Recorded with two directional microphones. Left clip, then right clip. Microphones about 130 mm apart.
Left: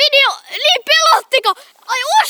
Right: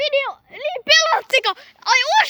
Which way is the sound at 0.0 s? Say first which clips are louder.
Left 9 dB; 20° left (ahead or behind).